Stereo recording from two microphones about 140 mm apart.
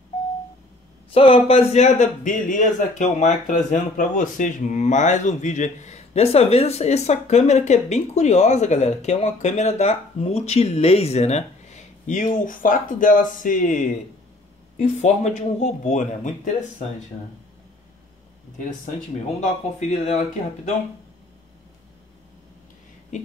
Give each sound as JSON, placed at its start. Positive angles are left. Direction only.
{"t": 1.1, "sound": "a man's voice", "side_deg": 40}
{"t": 14.8, "sound": "a man's voice", "side_deg": 55}
{"t": 19.4, "sound": "a man's voice", "side_deg": 60}